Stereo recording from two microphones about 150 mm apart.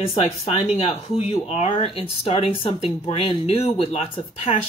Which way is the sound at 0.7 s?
40° left (ahead or behind).